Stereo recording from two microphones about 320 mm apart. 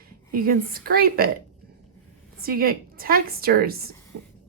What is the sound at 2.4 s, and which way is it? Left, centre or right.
A woman's voice, right.